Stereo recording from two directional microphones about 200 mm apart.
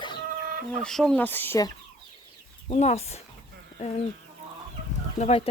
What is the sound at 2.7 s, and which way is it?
Speech, 35° left (ahead or behind).